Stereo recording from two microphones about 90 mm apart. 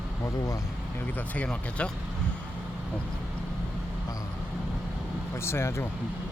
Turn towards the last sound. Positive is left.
turn(degrees=30)  # may be behind; listen again after turning